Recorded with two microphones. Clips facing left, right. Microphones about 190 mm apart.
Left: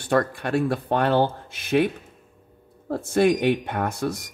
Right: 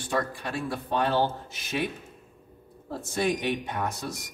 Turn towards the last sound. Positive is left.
turn(degrees=60)  # may be behind; listen again after turning